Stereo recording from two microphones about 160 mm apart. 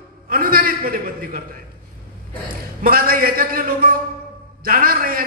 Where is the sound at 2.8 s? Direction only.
65° right (ahead or behind).